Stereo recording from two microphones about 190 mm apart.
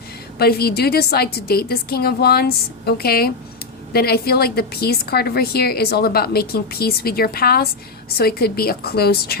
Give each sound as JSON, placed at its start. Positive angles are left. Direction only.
{"t": 0.3, "sound": "a woman's voice", "side_deg": 55}